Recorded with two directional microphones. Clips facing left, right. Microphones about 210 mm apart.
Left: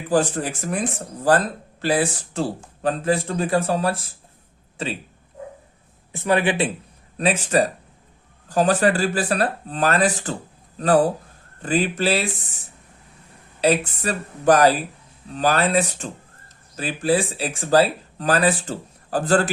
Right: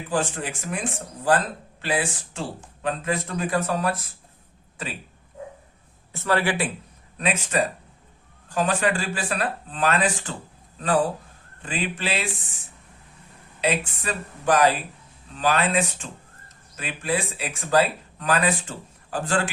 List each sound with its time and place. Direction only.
0.1 s speech: 40° left (ahead or behind)
6.1 s speech: 15° left (ahead or behind)
7.2 s speech: 35° left (ahead or behind)
13.6 s speech: 40° left (ahead or behind)